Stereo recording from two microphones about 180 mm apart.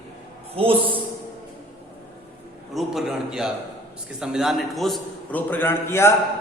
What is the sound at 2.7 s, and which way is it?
A man's voice, centre (ahead or behind).